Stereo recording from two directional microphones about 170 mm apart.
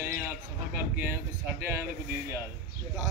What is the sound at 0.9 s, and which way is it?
Speech, 15° right (ahead or behind).